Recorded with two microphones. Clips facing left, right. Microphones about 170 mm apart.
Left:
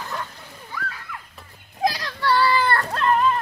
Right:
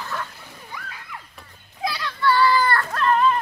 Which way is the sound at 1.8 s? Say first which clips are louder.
Left 3 dB; 40° left (ahead or behind).